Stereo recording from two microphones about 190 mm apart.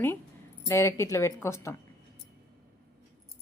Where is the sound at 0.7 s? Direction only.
15° left (ahead or behind).